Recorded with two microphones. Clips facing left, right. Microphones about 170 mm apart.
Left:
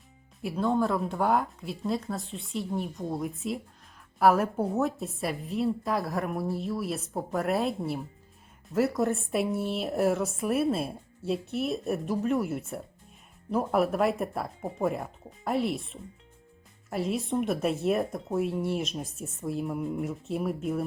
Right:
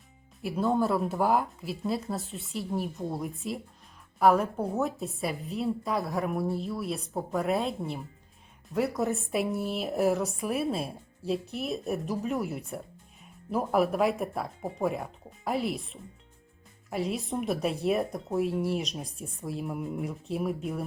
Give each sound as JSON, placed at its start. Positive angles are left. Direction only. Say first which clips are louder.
{"t": 0.4, "sound": "a woman's voice", "louder": "even", "side_deg": 0}